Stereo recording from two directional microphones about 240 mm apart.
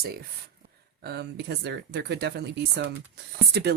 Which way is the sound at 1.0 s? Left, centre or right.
Right.